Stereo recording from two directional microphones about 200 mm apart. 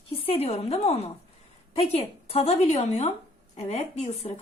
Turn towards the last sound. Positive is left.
turn(degrees=30)  # may be behind; listen again after turning